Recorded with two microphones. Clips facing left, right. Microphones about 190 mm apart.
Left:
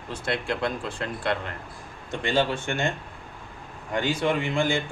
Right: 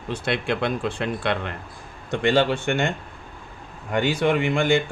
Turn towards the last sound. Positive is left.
turn(degrees=-65)  # may be behind; listen again after turning